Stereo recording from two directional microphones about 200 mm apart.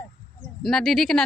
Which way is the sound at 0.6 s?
Centre (ahead or behind).